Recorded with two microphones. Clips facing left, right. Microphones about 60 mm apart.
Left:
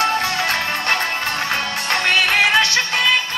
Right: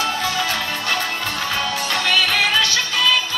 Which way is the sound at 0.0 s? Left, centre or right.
Left.